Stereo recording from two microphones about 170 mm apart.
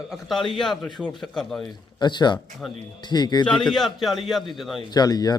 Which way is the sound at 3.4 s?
5° left (ahead or behind).